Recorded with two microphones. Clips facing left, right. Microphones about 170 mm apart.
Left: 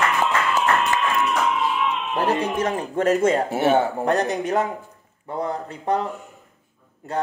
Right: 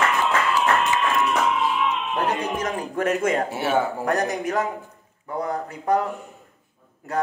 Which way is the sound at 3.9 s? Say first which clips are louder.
Left 2 dB; 25° left (ahead or behind).